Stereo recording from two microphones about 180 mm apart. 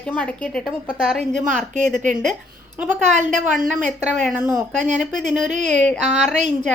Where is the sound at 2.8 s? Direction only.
5° right (ahead or behind).